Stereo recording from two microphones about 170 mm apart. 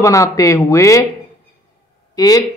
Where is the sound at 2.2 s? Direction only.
20° left (ahead or behind).